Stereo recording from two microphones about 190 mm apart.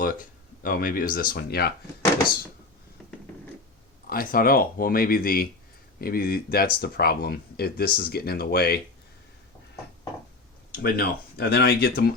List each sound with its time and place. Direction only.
0.0 s speech: 45° left (ahead or behind)
4.0 s speech: 50° left (ahead or behind)
10.8 s speech: 55° left (ahead or behind)